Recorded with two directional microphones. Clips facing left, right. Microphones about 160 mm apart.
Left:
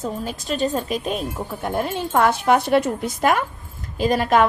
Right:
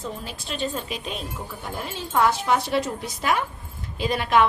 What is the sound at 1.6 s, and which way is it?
A woman's voice, 60° left (ahead or behind).